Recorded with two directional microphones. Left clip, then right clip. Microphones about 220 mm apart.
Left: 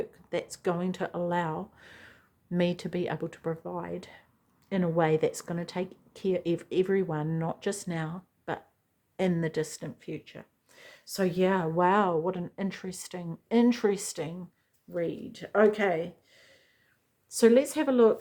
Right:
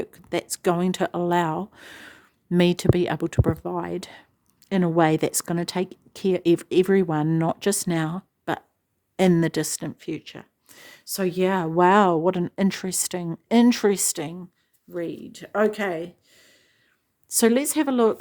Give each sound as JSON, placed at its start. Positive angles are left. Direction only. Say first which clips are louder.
{"t": 0.0, "sound": "speech", "louder": "right 5 dB", "side_deg": -50}